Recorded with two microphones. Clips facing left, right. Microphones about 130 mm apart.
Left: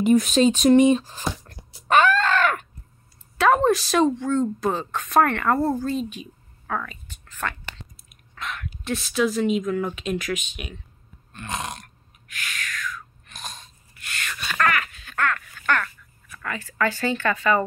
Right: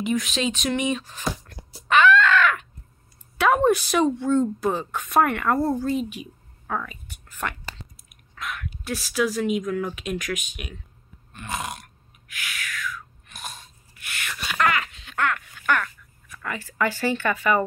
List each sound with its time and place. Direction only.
0.0 s speech: 45° left (ahead or behind)
1.9 s a sound: 40° left (ahead or behind)
3.3 s speech: 5° right (ahead or behind)
5.6 s speech: 10° left (ahead or behind)
5.9 s speech: 10° right (ahead or behind)
6.7 s whispering: 10° right (ahead or behind)
8.4 s speech: 5° right (ahead or behind)
11.3 s burping: 5° right (ahead or behind)
16.4 s speech: 15° right (ahead or behind)